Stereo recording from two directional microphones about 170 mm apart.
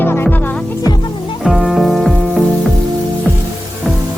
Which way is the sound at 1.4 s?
5° right (ahead or behind).